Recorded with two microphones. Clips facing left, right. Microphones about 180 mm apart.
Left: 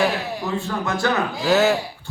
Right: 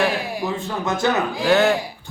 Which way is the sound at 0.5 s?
20° right (ahead or behind).